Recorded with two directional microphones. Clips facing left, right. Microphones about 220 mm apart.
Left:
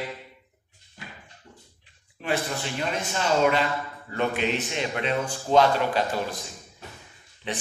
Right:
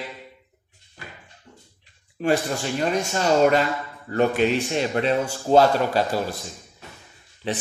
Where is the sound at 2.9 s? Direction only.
45° right (ahead or behind).